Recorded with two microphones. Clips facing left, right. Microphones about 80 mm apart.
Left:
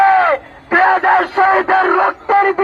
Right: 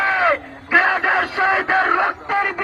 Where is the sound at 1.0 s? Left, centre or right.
Left.